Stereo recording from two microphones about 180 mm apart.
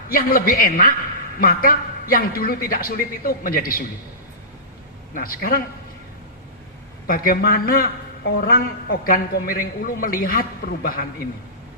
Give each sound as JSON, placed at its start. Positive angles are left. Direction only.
{"t": 0.1, "sound": "a man's voice", "side_deg": 50}
{"t": 5.1, "sound": "a man's voice", "side_deg": 55}
{"t": 7.1, "sound": "a man's voice", "side_deg": 55}